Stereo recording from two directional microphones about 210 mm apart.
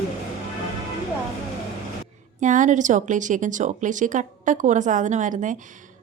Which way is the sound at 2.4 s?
35° right (ahead or behind).